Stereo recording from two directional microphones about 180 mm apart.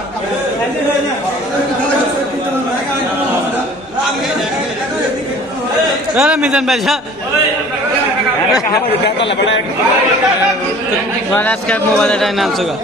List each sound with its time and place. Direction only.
6.1 s a man's voice: 5° right (ahead or behind)
9.0 s a man's voice: 85° left
11.3 s a man's voice: 10° left (ahead or behind)